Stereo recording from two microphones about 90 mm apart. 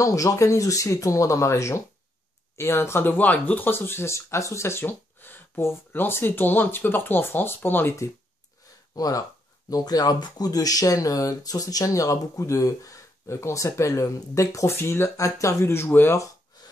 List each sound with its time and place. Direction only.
0.0 s speech: 40° left (ahead or behind)
8.9 s speech: 45° left (ahead or behind); by 16.2 s 25° left (ahead or behind)